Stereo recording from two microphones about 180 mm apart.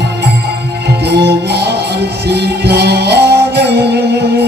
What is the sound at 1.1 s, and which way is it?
Music, 65° right (ahead or behind).